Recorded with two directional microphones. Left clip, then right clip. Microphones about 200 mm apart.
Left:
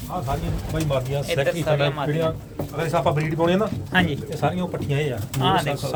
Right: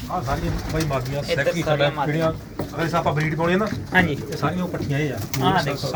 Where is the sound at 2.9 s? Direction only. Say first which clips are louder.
Left 1 dB; 40° left (ahead or behind).